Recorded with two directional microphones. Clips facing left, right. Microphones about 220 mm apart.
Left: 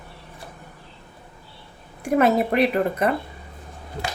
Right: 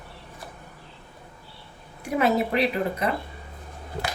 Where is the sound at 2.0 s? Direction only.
50° left (ahead or behind).